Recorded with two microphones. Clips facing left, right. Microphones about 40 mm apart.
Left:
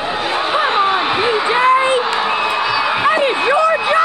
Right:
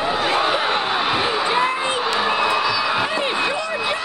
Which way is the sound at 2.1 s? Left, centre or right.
Centre.